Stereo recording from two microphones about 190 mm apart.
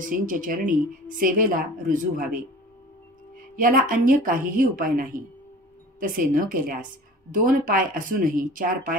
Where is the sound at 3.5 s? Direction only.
45° right (ahead or behind).